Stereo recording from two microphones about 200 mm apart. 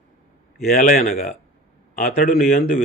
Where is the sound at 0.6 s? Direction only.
45° left (ahead or behind).